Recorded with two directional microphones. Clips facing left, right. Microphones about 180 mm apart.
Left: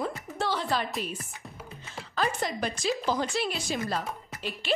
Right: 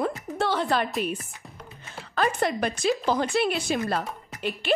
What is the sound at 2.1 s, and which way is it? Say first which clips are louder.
A woman's voice: right 5 dB; 60° right (ahead or behind).